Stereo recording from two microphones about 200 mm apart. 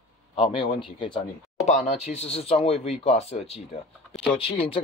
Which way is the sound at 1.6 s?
35° left (ahead or behind).